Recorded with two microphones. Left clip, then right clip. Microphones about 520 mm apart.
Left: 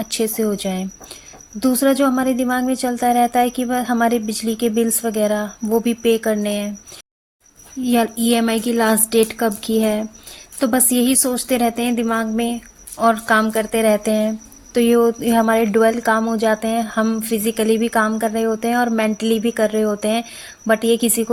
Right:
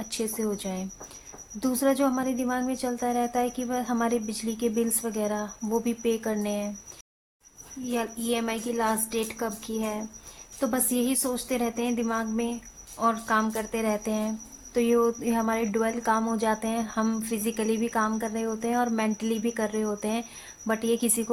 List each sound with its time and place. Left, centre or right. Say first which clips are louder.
0.0 s a woman's voice: left 10 dB; right
7.9 s a woman's voice: left 12 dB; right